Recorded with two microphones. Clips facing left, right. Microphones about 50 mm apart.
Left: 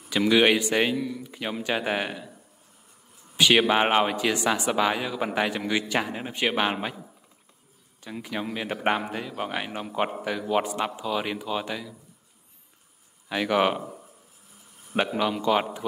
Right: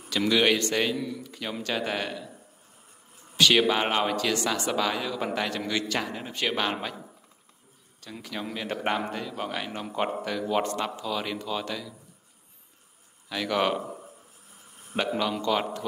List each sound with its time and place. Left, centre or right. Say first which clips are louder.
0.1 s a man's voice: left 3 dB; centre
3.3 s a man's voice: left 2 dB; centre
8.0 s speech: left 4 dB; centre
13.3 s a man's voice: left 3 dB; centre
15.1 s speech: left 3 dB; centre